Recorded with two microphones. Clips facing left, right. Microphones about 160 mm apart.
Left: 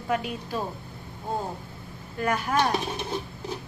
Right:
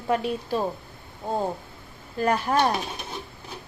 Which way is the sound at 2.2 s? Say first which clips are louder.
Right 3 dB; 35° right (ahead or behind).